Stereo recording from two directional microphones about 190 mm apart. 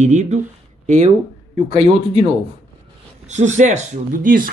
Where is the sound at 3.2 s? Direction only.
40° right (ahead or behind).